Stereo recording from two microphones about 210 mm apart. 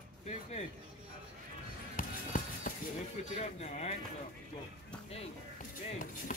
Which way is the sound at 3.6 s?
30° left (ahead or behind).